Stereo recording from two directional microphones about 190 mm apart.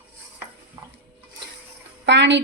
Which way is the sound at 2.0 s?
70° right (ahead or behind).